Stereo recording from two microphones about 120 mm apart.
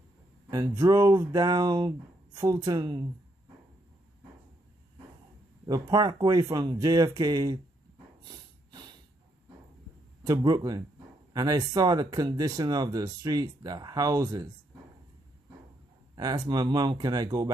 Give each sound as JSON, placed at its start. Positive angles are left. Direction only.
{"t": 0.5, "sound": "speech", "side_deg": -30}
{"t": 5.7, "sound": "speech", "side_deg": -30}
{"t": 10.2, "sound": "speech", "side_deg": -35}
{"t": 16.2, "sound": "speech", "side_deg": -35}